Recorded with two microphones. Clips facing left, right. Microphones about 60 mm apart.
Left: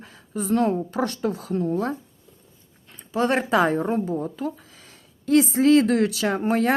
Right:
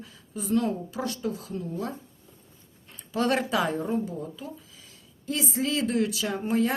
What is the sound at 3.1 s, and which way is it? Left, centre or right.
Speech, left.